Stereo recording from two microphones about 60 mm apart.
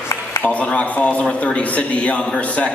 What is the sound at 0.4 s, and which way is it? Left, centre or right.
A man's voice, left.